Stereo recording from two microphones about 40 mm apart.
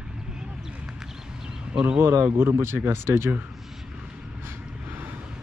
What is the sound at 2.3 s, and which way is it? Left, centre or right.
Speech, right.